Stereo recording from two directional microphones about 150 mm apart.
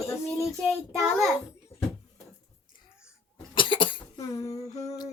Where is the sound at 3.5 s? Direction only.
35° left (ahead or behind).